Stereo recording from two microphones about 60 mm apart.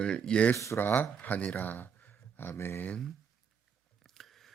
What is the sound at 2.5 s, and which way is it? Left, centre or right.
Speech, left.